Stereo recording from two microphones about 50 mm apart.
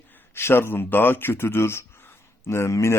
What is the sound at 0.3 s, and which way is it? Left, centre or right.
Speech, left.